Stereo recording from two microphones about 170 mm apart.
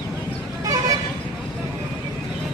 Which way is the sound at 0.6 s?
20° right (ahead or behind).